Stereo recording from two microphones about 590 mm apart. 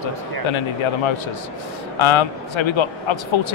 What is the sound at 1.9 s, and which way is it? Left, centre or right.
Speech, left.